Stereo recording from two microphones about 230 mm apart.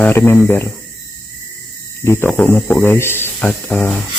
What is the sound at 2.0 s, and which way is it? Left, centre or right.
Speech, centre.